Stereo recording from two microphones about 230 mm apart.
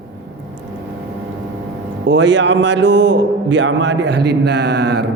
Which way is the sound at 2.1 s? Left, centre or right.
Right.